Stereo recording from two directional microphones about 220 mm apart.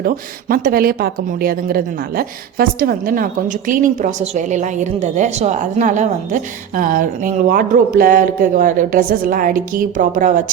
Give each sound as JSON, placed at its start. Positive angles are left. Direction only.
{"t": 0.0, "sound": "speech", "side_deg": -40}